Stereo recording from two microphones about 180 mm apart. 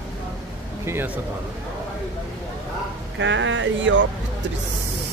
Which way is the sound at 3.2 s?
90° right.